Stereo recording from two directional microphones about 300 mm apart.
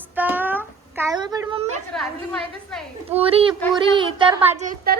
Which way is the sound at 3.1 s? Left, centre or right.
Centre.